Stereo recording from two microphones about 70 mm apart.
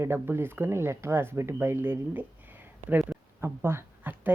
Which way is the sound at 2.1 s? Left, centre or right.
Right.